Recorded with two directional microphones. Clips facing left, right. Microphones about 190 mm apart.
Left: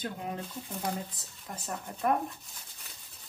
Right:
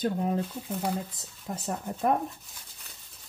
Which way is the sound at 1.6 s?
30° right (ahead or behind).